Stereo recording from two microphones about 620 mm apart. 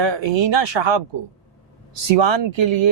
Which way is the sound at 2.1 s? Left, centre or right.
Right.